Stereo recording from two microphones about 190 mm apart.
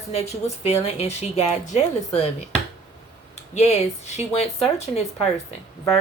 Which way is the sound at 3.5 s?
35° left (ahead or behind).